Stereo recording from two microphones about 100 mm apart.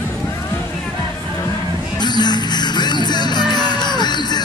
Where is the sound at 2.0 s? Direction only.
45° left (ahead or behind).